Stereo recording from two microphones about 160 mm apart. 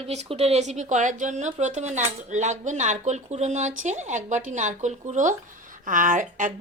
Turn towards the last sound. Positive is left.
turn(degrees=-55)  # may be behind; listen again after turning